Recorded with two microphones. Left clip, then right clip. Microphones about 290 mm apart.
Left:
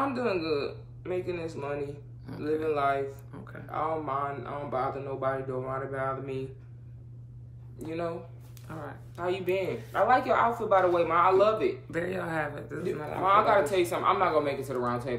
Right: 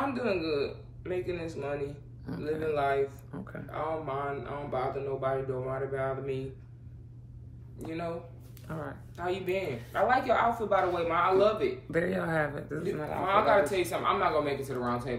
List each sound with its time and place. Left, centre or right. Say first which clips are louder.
0.0 s speech: left 2 dB; centre
2.3 s speech: right 1 dB; centre
2.7 s speech: right 1 dB; centre
3.3 s speech: right 2 dB; centre
3.7 s speech: left 3 dB; centre
7.8 s speech: left 2 dB; centre
8.6 s speech: right 1 dB; centre
9.1 s speech: left 3 dB; centre
11.9 s speech: right 2 dB; centre
13.2 s speech: left 2 dB; centre